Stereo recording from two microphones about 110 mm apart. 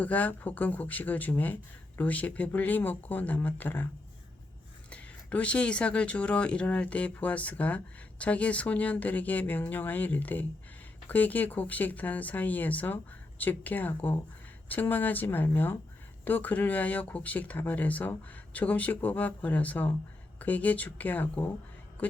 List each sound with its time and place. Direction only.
0.0 s speech: 15° left (ahead or behind)
4.9 s speech: 10° left (ahead or behind)